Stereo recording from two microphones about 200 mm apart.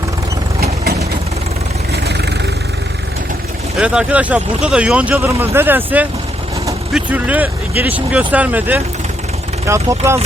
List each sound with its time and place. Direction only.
1.9 s vehicle: 55° right (ahead or behind)
3.8 s speech: 5° right (ahead or behind)